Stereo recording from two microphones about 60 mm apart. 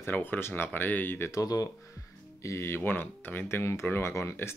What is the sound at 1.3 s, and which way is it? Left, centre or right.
Speech, left.